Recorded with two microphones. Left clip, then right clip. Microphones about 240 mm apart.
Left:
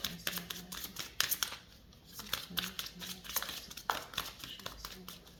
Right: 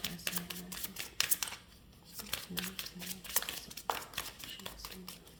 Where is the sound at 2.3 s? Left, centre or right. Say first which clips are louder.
Left 2 dB; centre.